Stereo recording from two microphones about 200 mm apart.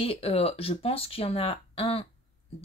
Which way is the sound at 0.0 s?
30° left (ahead or behind).